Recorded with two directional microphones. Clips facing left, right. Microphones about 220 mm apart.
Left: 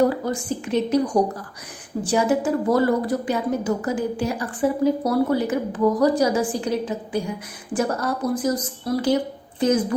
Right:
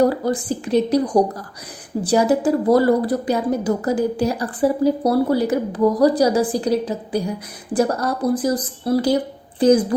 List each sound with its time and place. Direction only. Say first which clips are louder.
0.3 s a woman's voice: right 4 dB; 35° right (ahead or behind)